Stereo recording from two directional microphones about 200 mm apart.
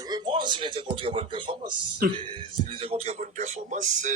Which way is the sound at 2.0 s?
45° right (ahead or behind).